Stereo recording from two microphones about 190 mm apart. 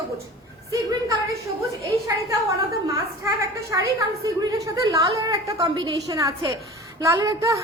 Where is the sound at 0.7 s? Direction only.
20° right (ahead or behind).